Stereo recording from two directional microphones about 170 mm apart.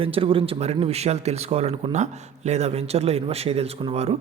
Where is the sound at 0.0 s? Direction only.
30° right (ahead or behind).